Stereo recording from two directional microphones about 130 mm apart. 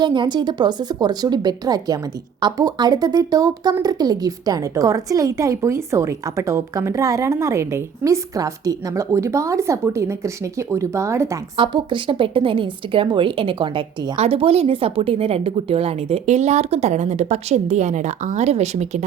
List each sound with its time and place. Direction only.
0.0 s a woman's voice: 35° right (ahead or behind)
11.5 s a woman's voice: 40° right (ahead or behind); by 19.0 s 60° right (ahead or behind)